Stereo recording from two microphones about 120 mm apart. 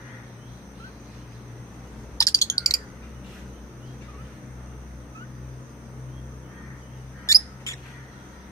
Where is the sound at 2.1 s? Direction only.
25° left (ahead or behind).